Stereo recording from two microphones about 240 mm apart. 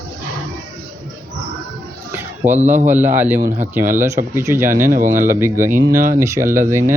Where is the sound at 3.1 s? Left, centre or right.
Centre.